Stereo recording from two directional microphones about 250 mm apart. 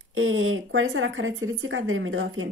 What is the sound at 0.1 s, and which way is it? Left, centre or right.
Speech, right.